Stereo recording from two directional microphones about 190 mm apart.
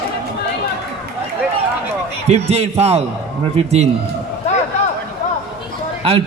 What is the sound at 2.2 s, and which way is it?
A man's voice, 35° right (ahead or behind).